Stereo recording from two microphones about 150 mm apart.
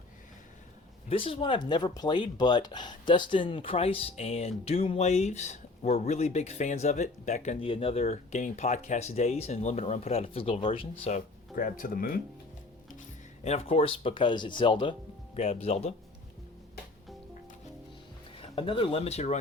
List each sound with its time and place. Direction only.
1.1 s speech: 40° left (ahead or behind)
11.1 s speech: 65° left (ahead or behind)
13.4 s speech: 45° left (ahead or behind)
18.3 s speech: 35° left (ahead or behind)